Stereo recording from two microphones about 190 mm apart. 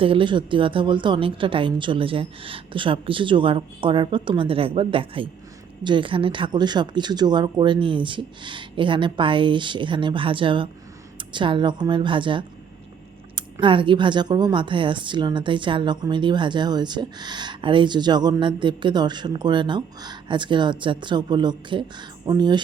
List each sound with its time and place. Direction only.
0.0 s a woman's voice: 25° right (ahead or behind)